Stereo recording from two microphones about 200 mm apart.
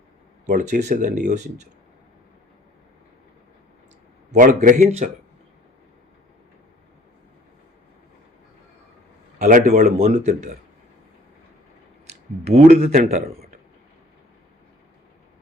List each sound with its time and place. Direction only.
0.4 s speech: 40° right (ahead or behind)
4.4 s speech: 40° right (ahead or behind)
9.4 s speech: 40° right (ahead or behind)
12.5 s speech: 30° right (ahead or behind)
12.7 s speech: 50° right (ahead or behind)